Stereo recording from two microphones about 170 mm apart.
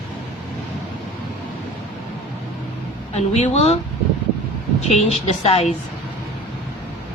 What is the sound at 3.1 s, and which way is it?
Speech, 40° left (ahead or behind).